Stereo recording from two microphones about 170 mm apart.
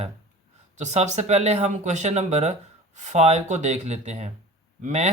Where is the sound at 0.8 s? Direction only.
40° right (ahead or behind).